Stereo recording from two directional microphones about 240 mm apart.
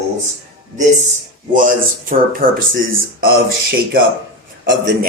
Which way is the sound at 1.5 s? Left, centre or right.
Right.